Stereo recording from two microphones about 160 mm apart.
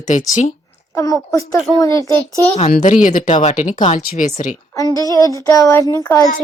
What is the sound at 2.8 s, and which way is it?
Speech, 55° left (ahead or behind).